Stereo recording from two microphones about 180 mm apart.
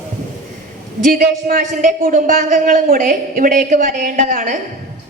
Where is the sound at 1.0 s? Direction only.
55° right (ahead or behind).